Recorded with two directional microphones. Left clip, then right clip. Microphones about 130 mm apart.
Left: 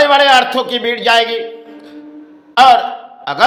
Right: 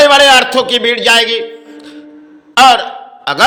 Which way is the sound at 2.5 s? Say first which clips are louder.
Right 1 dB; 20° right (ahead or behind).